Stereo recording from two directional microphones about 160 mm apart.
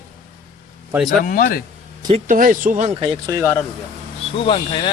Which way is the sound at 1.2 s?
60° left (ahead or behind).